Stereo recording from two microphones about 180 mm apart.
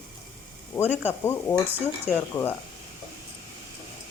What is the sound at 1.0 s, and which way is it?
Speech, 10° left (ahead or behind).